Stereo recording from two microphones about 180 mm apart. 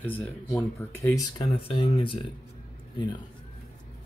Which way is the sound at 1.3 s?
30° left (ahead or behind).